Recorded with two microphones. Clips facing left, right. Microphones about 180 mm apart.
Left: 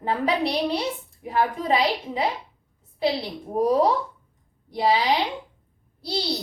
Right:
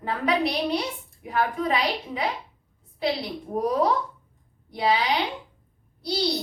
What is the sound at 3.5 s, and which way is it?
Speech, 30° left (ahead or behind).